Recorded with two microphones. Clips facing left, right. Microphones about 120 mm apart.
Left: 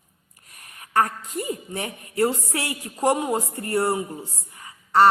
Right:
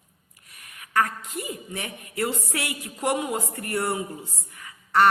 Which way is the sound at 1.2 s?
35° left (ahead or behind).